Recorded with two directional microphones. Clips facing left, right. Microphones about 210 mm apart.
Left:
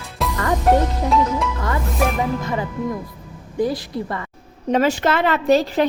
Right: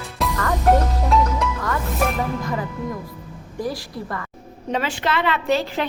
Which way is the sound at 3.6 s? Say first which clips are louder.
Left 6 dB; 25° left (ahead or behind).